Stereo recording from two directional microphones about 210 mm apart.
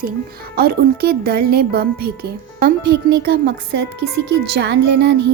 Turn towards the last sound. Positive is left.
turn(degrees=-55)  # may be behind; listen again after turning